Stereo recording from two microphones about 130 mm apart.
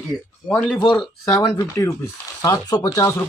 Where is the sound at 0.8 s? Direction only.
35° left (ahead or behind).